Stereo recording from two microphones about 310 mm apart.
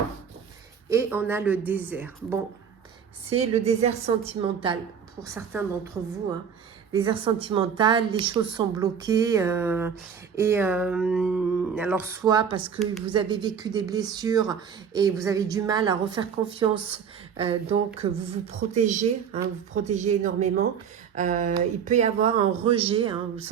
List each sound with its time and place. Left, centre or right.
0.9 s speech: centre
3.2 s speech: centre
6.9 s speech: centre